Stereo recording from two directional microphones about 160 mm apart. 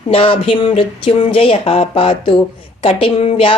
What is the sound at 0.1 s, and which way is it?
A woman's voice, 35° left (ahead or behind).